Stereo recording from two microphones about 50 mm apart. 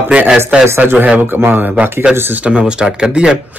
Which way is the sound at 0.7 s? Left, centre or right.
Right.